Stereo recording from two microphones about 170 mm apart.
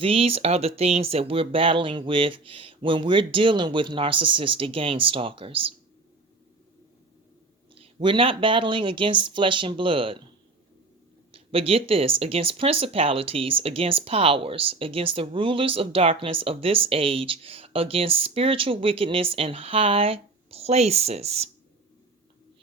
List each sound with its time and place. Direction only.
0.0 s speech: 35° right (ahead or behind)
7.8 s speech: 30° right (ahead or behind)
11.3 s speech: 35° right (ahead or behind)